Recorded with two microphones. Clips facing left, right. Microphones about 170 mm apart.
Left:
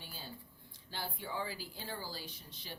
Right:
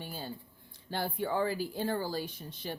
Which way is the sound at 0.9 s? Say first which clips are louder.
Right 10 dB; 55° right (ahead or behind).